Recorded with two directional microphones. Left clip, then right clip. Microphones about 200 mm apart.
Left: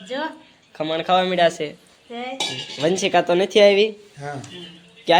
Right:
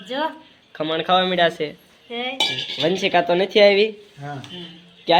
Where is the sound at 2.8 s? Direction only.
10° left (ahead or behind).